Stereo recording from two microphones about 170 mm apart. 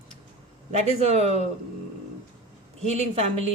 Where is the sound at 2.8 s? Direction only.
40° right (ahead or behind).